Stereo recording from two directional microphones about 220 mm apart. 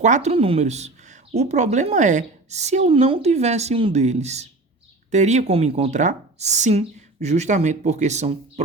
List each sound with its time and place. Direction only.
0.0 s speech: 30° right (ahead or behind)